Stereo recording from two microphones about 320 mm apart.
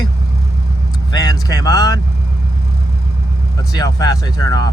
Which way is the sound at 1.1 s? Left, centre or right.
Centre.